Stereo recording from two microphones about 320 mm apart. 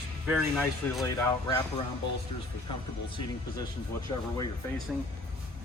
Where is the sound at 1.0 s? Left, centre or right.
Centre.